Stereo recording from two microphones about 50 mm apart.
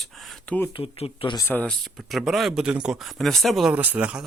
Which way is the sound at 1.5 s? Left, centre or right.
Centre.